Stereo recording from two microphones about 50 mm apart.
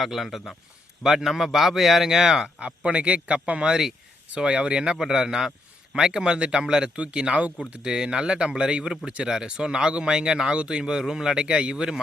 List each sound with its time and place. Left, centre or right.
0.0 s speech: centre
2.6 s speech: right